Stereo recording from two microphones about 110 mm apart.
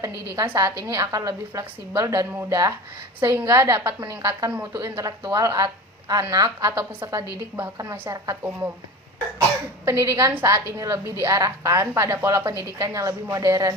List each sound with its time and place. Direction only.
0.0 s a woman's voice: 25° right (ahead or behind)
9.8 s a woman's voice: 25° right (ahead or behind)